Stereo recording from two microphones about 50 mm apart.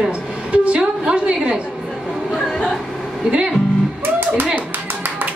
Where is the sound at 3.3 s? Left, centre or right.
Centre.